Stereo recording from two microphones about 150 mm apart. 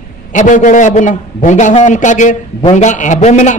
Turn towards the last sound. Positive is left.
turn(degrees=50)  # may be behind; listen again after turning